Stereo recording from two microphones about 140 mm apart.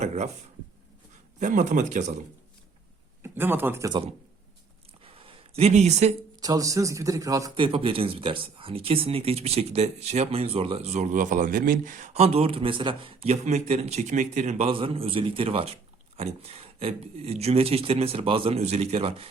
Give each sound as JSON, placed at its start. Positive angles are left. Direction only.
{"t": 0.0, "sound": "speech", "side_deg": -55}
{"t": 1.4, "sound": "speech", "side_deg": -65}
{"t": 3.2, "sound": "speech", "side_deg": -15}
{"t": 5.0, "sound": "a sound", "side_deg": -40}
{"t": 6.4, "sound": "a man's voice", "side_deg": -25}
{"t": 7.5, "sound": "speech", "side_deg": -40}
{"t": 14.7, "sound": "speech", "side_deg": -40}